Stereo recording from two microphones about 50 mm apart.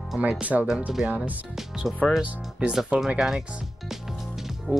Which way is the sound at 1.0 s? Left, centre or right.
Centre.